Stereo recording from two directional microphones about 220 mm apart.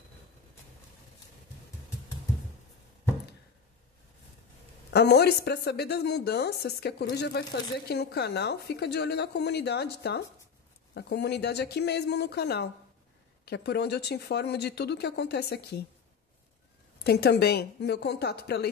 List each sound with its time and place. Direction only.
4.9 s a woman's voice: 50° left (ahead or behind)
17.0 s a woman's voice: 50° left (ahead or behind)